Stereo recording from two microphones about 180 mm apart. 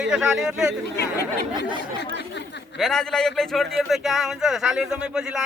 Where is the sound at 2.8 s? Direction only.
5° left (ahead or behind).